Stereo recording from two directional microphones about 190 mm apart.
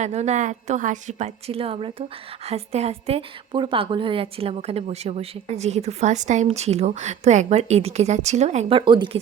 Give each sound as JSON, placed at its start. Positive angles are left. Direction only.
{"t": 0.0, "sound": "a woman's voice", "side_deg": -35}